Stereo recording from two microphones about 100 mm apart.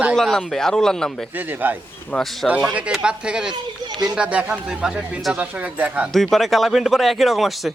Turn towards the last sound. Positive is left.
turn(degrees=0)  # may be behind; listen again after turning